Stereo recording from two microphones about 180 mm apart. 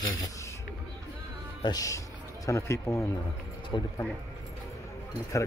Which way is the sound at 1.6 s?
20° left (ahead or behind).